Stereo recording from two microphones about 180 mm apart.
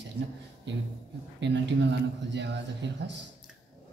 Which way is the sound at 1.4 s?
75° right (ahead or behind).